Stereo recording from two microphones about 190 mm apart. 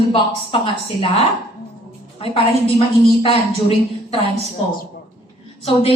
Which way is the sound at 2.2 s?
30° left (ahead or behind).